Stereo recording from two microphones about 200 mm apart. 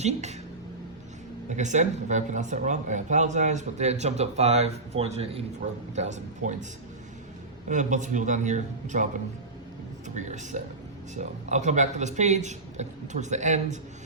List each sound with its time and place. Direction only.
0.0 s speech: 35° right (ahead or behind)
1.5 s speech: 35° right (ahead or behind)
7.7 s speech: 40° right (ahead or behind)
10.2 s speech: 35° right (ahead or behind)